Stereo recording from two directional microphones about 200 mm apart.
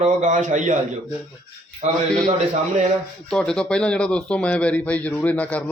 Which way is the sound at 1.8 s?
35° right (ahead or behind).